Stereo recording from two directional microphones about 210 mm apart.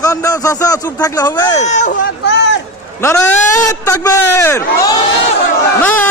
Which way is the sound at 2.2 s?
55° left (ahead or behind).